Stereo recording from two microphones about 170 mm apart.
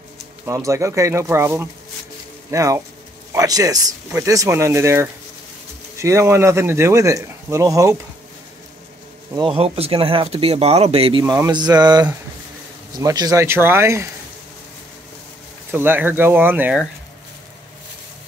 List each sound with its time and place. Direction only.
0.5 s speech: 15° right (ahead or behind)
2.5 s mantra: 20° right (ahead or behind)
3.3 s speech: 20° right (ahead or behind)
9.3 s speech: 30° right (ahead or behind)
11.2 s mantra: 20° right (ahead or behind)
12.9 s speech: 25° right (ahead or behind)
15.7 s speech: 10° right (ahead or behind)